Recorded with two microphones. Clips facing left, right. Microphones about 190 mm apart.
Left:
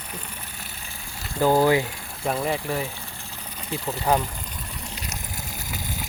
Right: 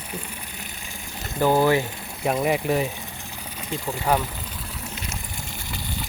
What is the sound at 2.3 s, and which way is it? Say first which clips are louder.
Speech: right 4 dB; 15° right (ahead or behind).